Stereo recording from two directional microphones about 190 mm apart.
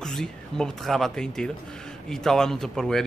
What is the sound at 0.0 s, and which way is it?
Speech, 5° left (ahead or behind).